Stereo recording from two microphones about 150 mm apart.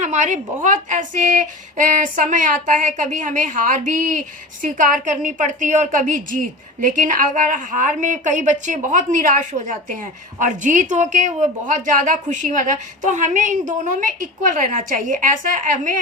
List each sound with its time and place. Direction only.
0.0 s a woman's voice: 55° right (ahead or behind)